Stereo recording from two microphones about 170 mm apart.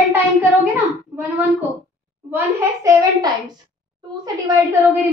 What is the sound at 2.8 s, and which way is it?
Speech, 20° right (ahead or behind).